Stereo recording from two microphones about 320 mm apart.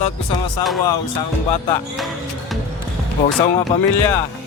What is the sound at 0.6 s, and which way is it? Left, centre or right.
Speech, left.